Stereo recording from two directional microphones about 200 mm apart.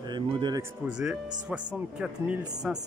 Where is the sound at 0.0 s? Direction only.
20° right (ahead or behind).